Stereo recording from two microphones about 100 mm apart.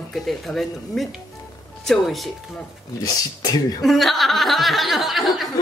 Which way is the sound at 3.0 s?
40° left (ahead or behind).